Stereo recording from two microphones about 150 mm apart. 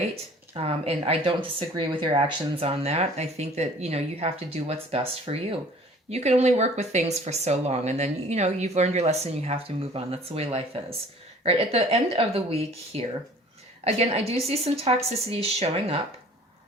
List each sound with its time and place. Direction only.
0.5 s speech: 40° right (ahead or behind)